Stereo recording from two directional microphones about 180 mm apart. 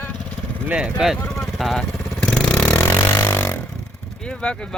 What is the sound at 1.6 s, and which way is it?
Vehicle, centre (ahead or behind).